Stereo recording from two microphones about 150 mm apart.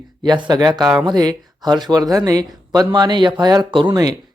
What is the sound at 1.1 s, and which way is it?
Speech, 25° right (ahead or behind).